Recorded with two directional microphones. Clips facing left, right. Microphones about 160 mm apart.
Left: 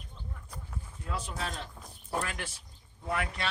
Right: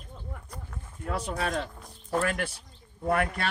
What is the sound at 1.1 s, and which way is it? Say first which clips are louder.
Speech: right 7 dB; 65° right (ahead or behind).